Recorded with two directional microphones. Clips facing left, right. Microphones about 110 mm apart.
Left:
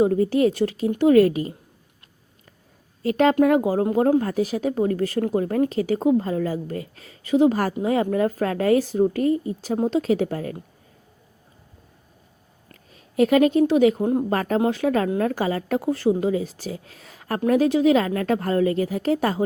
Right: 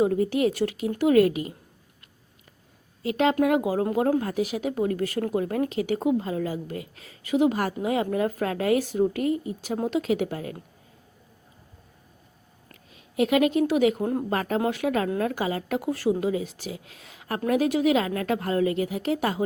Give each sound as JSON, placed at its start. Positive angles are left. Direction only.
{"t": 0.0, "sound": "speech", "side_deg": 35}
{"t": 3.0, "sound": "speech", "side_deg": 40}
{"t": 10.0, "sound": "speech", "side_deg": 35}
{"t": 12.9, "sound": "a woman's voice", "side_deg": 40}
{"t": 14.0, "sound": "speech", "side_deg": 20}
{"t": 14.3, "sound": "speech", "side_deg": 40}